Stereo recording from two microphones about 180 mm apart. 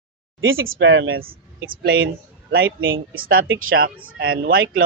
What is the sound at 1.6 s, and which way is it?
Speech, 60° right (ahead or behind).